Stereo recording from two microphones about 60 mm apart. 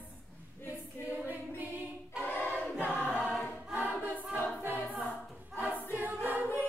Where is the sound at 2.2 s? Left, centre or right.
Left.